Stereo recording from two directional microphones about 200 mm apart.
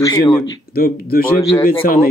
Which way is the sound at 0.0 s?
15° left (ahead or behind).